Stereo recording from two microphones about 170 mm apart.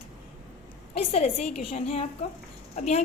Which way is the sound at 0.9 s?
35° left (ahead or behind).